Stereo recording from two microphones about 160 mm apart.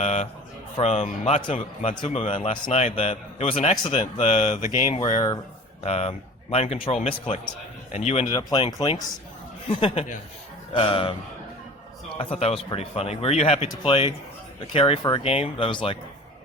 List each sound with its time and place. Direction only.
0.0 s a man's voice: 40° left (ahead or behind)
4.9 s a man's voice: 35° left (ahead or behind)
8.3 s a man's voice: 25° left (ahead or behind)